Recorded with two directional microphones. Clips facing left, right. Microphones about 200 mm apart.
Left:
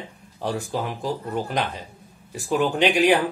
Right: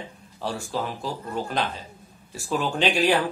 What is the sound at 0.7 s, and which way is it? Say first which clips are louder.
Speech: right 1 dB; 15° left (ahead or behind).